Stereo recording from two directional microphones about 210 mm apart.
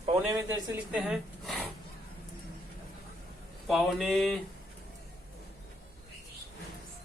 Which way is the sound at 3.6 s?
Centre (ahead or behind).